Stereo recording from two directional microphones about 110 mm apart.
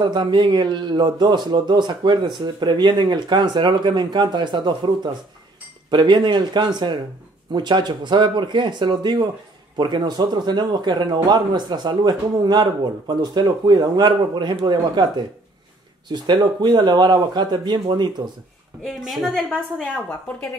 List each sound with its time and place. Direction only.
0.0 s a man's voice: 40° right (ahead or behind)
19.0 s a woman's voice: centre (ahead or behind)